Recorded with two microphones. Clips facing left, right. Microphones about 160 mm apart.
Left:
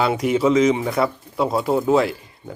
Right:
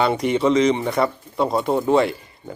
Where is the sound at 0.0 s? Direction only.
5° left (ahead or behind).